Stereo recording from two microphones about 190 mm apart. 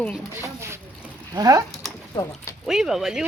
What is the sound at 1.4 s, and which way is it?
Speech, 20° right (ahead or behind).